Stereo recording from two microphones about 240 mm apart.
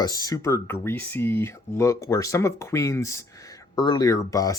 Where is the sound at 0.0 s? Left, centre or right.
Centre.